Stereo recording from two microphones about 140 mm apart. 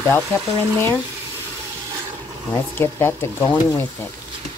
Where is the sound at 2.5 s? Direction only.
15° left (ahead or behind).